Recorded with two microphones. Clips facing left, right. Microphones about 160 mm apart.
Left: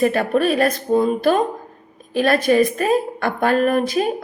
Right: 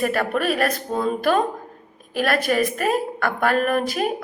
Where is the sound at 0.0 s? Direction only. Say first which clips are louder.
Left 5 dB; 25° left (ahead or behind).